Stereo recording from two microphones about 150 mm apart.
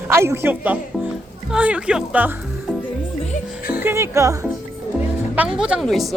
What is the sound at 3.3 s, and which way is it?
Music, 70° left (ahead or behind).